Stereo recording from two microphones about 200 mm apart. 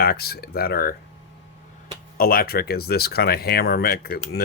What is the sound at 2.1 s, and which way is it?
Speech, 50° left (ahead or behind).